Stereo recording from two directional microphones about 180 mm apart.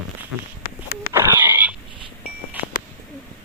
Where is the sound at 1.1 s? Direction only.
15° right (ahead or behind).